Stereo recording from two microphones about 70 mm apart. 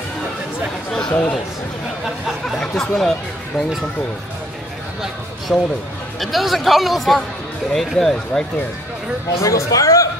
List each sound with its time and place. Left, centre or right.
1.1 s speech: centre
2.6 s speech: centre
5.5 s speech: centre
9.4 s speech: left